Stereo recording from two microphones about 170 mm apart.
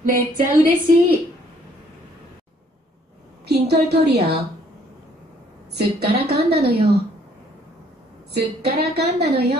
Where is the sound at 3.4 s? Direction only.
70° right (ahead or behind).